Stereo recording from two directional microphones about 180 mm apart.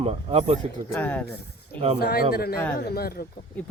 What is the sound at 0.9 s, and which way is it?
Speech, 10° left (ahead or behind).